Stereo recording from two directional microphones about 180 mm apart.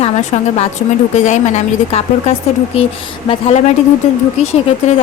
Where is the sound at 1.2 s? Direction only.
40° left (ahead or behind).